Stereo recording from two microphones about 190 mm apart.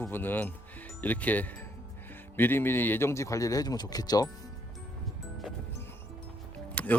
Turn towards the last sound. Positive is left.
turn(degrees=5)  # may be behind; listen again after turning